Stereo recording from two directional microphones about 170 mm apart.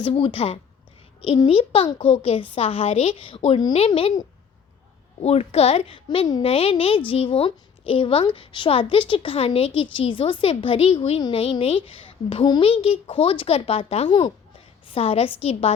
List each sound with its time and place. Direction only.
0.0 s a woman's voice: 30° left (ahead or behind)